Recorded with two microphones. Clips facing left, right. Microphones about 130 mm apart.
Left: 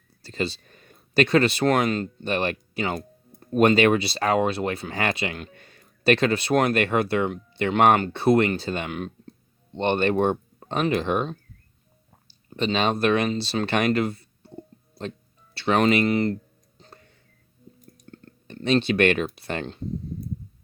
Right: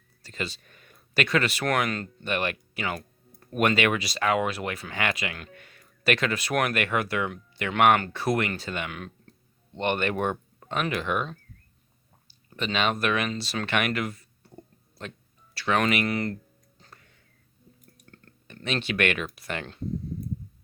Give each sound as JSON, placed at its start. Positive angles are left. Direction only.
{"t": 0.2, "sound": "speech", "side_deg": 30}
{"t": 16.7, "sound": "music", "side_deg": 25}
{"t": 17.7, "sound": "clicking", "side_deg": 30}